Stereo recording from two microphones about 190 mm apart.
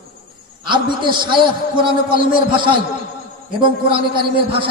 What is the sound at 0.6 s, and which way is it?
A man's voice, 25° right (ahead or behind).